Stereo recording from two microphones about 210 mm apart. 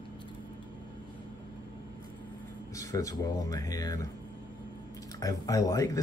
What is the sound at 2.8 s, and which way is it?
Speech, 15° left (ahead or behind).